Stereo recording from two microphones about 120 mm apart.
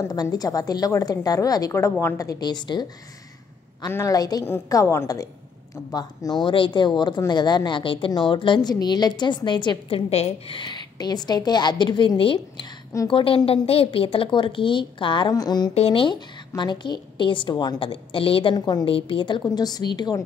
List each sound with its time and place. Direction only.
0.0 s a woman's voice: 30° left (ahead or behind)
3.9 s a woman's voice: 30° left (ahead or behind)
6.4 s a woman's voice: 45° left (ahead or behind)
15.7 s a woman's voice: 55° left (ahead or behind); by 17.7 s 40° left (ahead or behind)
17.7 s a woman's voice: 50° left (ahead or behind)
18.9 s a woman's voice: 50° left (ahead or behind)